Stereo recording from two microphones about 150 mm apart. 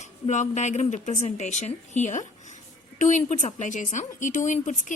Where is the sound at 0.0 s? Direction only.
55° left (ahead or behind).